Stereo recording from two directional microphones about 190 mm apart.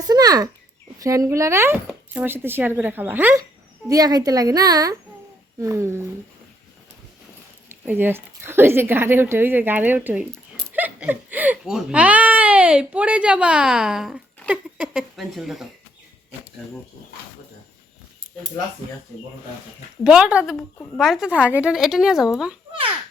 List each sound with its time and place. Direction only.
0.0 s a sound: 20° right (ahead or behind)
1.0 s speech: 15° right (ahead or behind)
7.7 s speech: 10° right (ahead or behind)
20.1 s speech: 5° right (ahead or behind)